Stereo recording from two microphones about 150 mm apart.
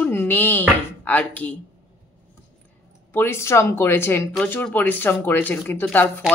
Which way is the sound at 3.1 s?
15° left (ahead or behind).